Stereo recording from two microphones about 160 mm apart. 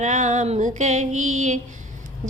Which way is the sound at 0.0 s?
50° right (ahead or behind).